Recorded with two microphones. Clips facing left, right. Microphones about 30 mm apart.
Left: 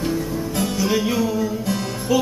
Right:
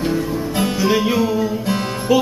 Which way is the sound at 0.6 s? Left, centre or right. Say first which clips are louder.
Right 4 dB; right.